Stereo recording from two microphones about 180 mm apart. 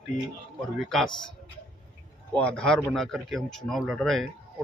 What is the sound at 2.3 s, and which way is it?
Speech, 5° left (ahead or behind).